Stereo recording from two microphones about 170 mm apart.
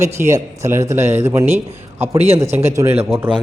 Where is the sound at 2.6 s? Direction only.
15° right (ahead or behind).